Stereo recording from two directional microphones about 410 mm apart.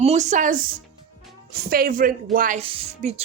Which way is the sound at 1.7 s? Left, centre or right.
Right.